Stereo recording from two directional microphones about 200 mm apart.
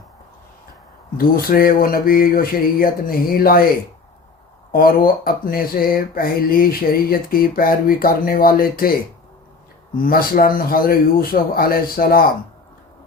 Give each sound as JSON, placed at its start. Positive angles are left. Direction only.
{"t": 1.1, "sound": "speech", "side_deg": 45}
{"t": 4.7, "sound": "speech", "side_deg": 45}
{"t": 10.0, "sound": "speech", "side_deg": 45}